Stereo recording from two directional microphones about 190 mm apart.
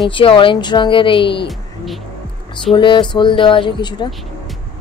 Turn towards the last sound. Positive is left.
turn(degrees=25)  # may be behind; listen again after turning